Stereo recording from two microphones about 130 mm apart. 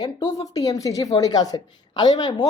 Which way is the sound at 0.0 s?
30° left (ahead or behind).